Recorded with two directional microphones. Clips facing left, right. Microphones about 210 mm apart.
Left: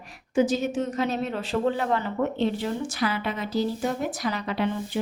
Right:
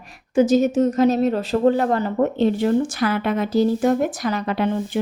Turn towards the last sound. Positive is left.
turn(degrees=-50)  # may be behind; listen again after turning